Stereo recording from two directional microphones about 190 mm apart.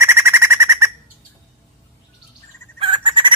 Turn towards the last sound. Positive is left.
turn(degrees=-25)  # may be behind; listen again after turning